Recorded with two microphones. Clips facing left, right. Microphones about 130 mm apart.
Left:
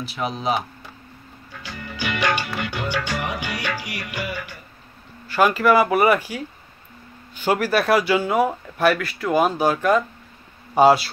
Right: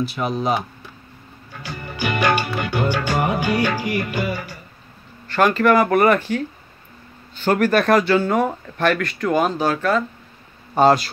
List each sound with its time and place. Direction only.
0.0 s speech: centre (ahead or behind)
1.6 s music: 50° right (ahead or behind)
5.3 s speech: 5° left (ahead or behind)